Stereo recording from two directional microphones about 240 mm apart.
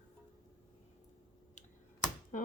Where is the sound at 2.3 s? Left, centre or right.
Left.